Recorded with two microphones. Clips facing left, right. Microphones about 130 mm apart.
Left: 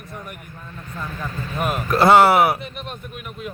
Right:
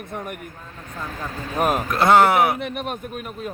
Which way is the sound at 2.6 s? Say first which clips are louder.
Right 6 dB; 50° right (ahead or behind).